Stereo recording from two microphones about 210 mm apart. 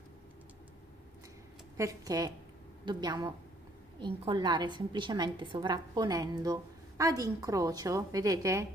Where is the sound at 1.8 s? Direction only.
15° right (ahead or behind).